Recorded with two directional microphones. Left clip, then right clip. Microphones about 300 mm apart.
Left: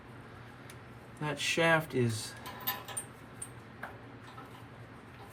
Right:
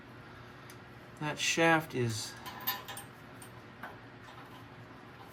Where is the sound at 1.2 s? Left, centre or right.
Right.